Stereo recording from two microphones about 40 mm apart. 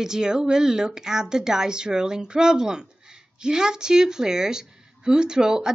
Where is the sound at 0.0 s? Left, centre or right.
Centre.